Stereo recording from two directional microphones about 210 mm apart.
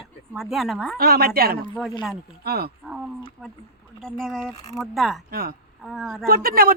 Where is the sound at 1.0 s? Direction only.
50° right (ahead or behind).